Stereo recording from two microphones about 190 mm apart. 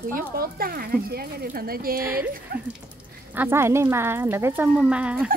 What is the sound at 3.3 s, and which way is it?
Speech, 10° right (ahead or behind).